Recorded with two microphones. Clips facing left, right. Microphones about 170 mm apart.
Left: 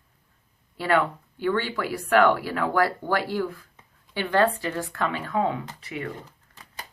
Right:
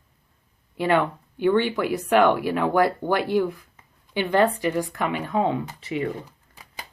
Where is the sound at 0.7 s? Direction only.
20° right (ahead or behind).